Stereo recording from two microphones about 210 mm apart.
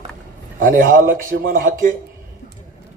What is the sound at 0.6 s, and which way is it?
A man's voice, 40° right (ahead or behind).